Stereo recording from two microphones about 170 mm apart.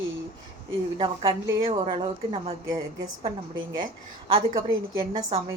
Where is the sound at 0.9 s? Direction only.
25° right (ahead or behind).